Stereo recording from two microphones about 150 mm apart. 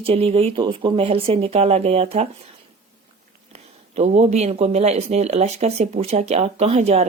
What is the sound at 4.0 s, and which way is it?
Speech, 50° right (ahead or behind).